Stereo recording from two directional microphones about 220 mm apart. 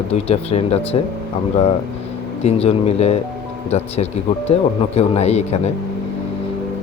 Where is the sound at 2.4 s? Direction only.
30° left (ahead or behind).